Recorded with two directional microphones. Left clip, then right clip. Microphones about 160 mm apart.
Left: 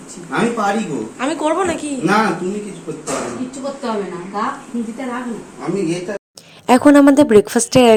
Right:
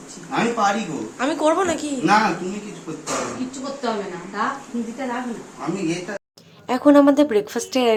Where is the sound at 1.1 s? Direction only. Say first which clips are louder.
Left 1 dB; 15° right (ahead or behind).